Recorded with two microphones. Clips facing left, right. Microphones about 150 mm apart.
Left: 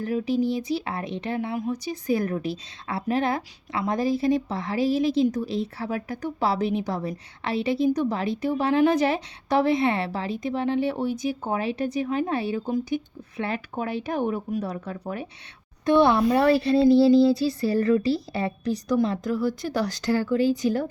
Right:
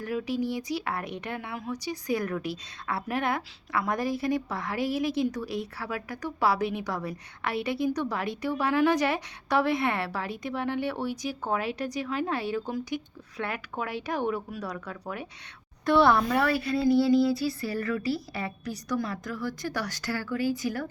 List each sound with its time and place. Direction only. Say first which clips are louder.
0.0 s speech: left 5 dB; 25° left (ahead or behind)